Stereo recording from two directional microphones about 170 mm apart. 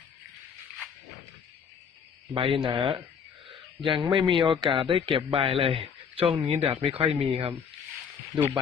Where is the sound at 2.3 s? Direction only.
30° right (ahead or behind).